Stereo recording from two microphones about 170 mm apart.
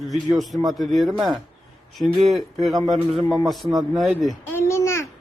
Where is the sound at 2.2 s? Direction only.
Centre (ahead or behind).